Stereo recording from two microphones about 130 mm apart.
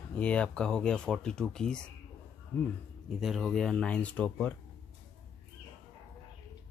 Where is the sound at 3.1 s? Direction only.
Centre (ahead or behind).